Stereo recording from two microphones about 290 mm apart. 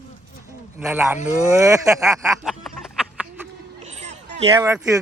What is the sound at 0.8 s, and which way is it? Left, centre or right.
Speech, centre.